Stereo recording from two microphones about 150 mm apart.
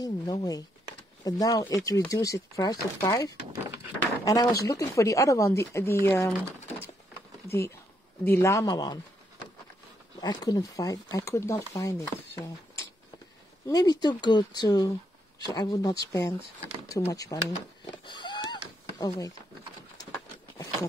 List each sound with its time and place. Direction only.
0.0 s speech: 25° left (ahead or behind)
7.4 s speech: 15° left (ahead or behind)
10.2 s speech: 25° left (ahead or behind)
18.0 s a sound: 30° left (ahead or behind)
18.9 s speech: 25° left (ahead or behind)